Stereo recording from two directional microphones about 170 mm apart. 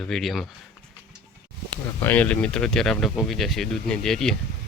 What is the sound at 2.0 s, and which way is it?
Speech, 10° left (ahead or behind).